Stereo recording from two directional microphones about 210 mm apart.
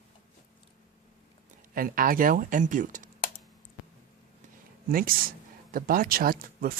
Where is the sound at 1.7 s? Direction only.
40° right (ahead or behind).